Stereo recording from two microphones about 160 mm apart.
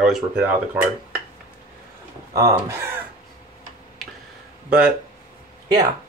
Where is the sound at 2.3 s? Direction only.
20° right (ahead or behind).